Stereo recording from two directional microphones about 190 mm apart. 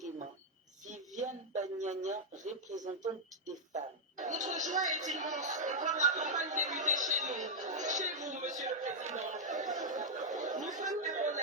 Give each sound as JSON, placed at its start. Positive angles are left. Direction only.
{"t": 0.9, "sound": "a sound", "side_deg": -40}
{"t": 2.7, "sound": "speech", "side_deg": -20}
{"t": 3.4, "sound": "speech", "side_deg": -40}
{"t": 9.8, "sound": "chatter", "side_deg": -40}